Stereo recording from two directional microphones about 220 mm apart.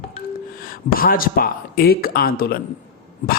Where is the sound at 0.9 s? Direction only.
40° left (ahead or behind).